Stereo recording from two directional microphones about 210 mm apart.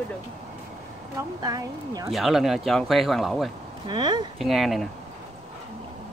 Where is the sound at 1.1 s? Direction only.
15° right (ahead or behind).